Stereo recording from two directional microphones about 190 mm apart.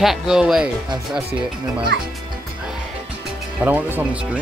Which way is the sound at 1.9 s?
65° right (ahead or behind).